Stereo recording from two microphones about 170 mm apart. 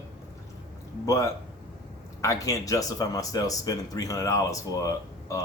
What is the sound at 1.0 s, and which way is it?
Speech, 20° left (ahead or behind).